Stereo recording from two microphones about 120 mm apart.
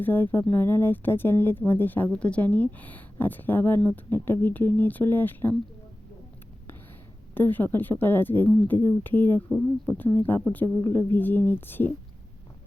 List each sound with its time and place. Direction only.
0.0 s speech: 15° left (ahead or behind)
7.3 s speech: 15° left (ahead or behind)